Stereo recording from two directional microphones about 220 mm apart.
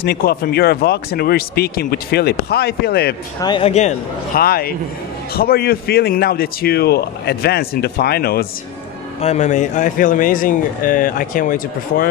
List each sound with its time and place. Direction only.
0.0 s speech: 45° left (ahead or behind)
3.3 s speech: 20° left (ahead or behind)
4.4 s speech: 45° left (ahead or behind)
9.2 s speech: 30° left (ahead or behind)